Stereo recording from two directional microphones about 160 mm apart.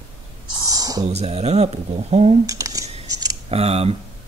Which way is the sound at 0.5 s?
25° right (ahead or behind).